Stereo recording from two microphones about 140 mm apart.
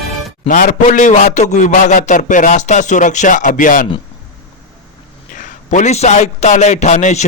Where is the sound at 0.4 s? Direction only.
70° left (ahead or behind).